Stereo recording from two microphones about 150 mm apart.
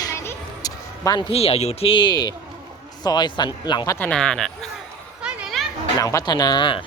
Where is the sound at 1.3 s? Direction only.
40° left (ahead or behind).